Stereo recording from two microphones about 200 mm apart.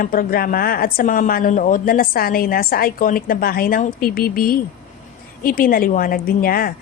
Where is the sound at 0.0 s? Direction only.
45° left (ahead or behind).